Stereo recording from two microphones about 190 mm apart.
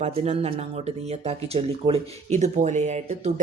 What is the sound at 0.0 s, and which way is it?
Speech, 30° right (ahead or behind).